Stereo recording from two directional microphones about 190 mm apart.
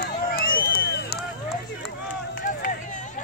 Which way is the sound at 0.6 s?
55° left (ahead or behind).